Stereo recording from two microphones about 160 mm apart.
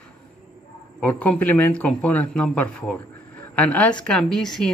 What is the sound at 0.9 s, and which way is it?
Speech, 10° left (ahead or behind).